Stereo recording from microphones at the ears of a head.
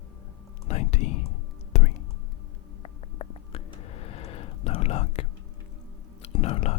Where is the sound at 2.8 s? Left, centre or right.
Left.